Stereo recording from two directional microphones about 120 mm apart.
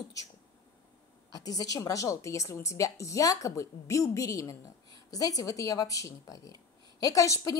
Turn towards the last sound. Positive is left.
turn(degrees=25)  # may be behind; listen again after turning